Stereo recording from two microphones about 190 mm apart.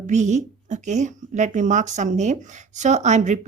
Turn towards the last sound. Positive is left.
turn(degrees=-40)  # may be behind; listen again after turning